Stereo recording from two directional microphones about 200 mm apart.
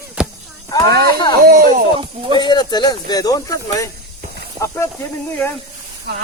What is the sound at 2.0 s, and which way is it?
Speech, 25° right (ahead or behind).